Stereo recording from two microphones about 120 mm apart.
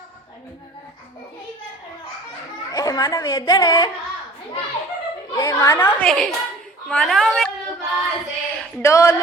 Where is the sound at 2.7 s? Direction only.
30° left (ahead or behind).